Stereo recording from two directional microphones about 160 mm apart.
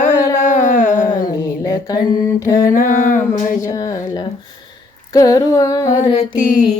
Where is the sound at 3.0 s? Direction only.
50° left (ahead or behind).